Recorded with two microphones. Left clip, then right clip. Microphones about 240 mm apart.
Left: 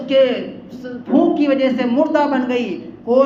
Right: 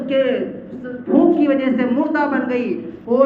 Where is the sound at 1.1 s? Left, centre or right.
Left.